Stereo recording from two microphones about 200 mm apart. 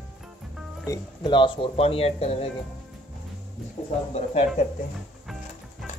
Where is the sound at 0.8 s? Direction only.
20° left (ahead or behind).